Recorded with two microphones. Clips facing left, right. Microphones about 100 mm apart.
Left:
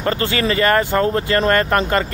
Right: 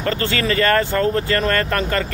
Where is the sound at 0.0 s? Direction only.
20° left (ahead or behind).